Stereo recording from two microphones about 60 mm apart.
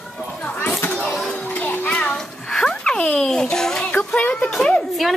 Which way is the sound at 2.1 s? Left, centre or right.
Centre.